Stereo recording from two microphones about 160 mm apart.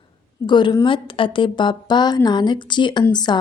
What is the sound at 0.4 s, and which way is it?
Speech, 30° left (ahead or behind).